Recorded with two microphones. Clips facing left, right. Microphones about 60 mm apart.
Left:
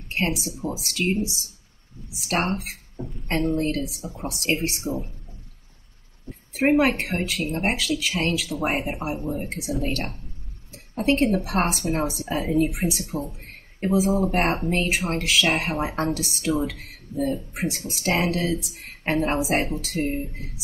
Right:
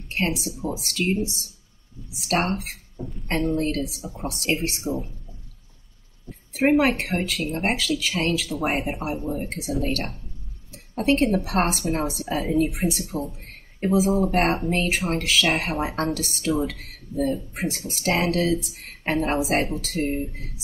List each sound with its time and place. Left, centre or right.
0.6 s a woman's voice: centre
2.1 s a woman's voice: centre
3.0 s speech: left
3.5 s a woman's voice: centre
6.3 s a sound: left
6.6 s a woman's voice: centre